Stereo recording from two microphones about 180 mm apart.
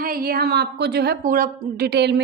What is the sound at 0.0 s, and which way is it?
A woman's voice, 55° right (ahead or behind).